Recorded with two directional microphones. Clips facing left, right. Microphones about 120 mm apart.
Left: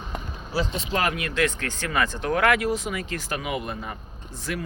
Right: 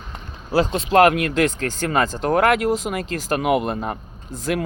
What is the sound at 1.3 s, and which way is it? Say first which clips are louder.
Speech: right 5 dB; 40° right (ahead or behind).